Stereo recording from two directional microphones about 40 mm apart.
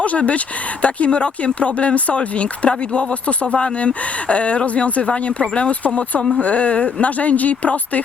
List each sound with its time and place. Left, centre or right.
0.0 s speech: left